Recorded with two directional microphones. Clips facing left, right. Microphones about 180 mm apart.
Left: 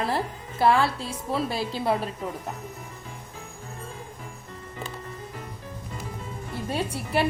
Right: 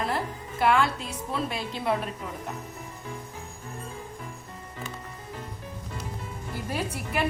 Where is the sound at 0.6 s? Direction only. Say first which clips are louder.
Left 2 dB; 35° left (ahead or behind).